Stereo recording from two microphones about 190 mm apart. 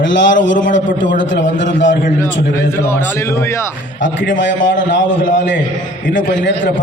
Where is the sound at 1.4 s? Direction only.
75° left (ahead or behind).